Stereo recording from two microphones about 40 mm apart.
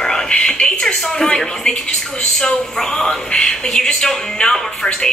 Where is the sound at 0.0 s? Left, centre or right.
Centre.